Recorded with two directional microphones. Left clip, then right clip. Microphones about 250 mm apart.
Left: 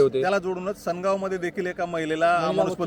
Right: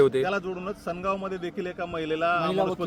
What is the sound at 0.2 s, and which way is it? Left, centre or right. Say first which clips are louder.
A man's voice: left 4 dB; left.